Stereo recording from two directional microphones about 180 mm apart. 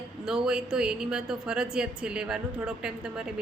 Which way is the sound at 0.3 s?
5° right (ahead or behind).